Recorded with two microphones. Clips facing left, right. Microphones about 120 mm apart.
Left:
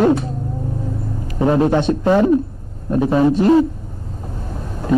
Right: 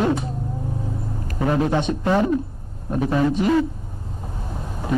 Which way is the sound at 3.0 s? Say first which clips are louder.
Left 5 dB; 25° left (ahead or behind).